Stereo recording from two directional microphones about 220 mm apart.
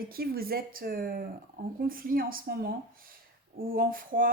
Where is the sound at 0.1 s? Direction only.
45° right (ahead or behind).